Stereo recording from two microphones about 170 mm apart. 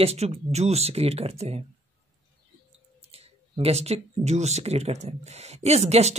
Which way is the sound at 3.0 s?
35° right (ahead or behind).